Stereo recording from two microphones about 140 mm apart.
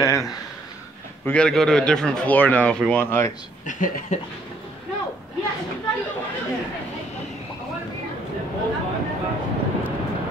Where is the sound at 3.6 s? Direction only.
65° left (ahead or behind).